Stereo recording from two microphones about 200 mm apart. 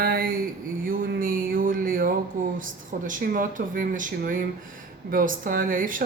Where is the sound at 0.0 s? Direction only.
50° right (ahead or behind).